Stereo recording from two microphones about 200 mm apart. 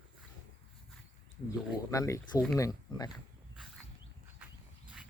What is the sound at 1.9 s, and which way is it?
Speech, 15° left (ahead or behind).